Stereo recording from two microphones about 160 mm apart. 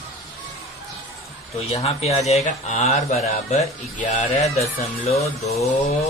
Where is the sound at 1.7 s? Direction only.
40° left (ahead or behind).